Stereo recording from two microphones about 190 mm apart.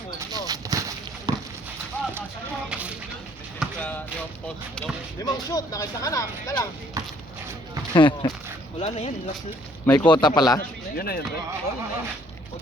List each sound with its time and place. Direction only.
0.2 s a sound: 20° right (ahead or behind)
2.6 s a sound: 5° right (ahead or behind)
3.6 s a sound: 10° left (ahead or behind)
5.2 s speech: 20° left (ahead or behind)
7.9 s speech: 25° left (ahead or behind)
8.8 s speech: 35° left (ahead or behind)
9.8 s a man's voice: 10° left (ahead or behind)
10.1 s speech: 25° left (ahead or behind)
10.6 s speech: 50° left (ahead or behind)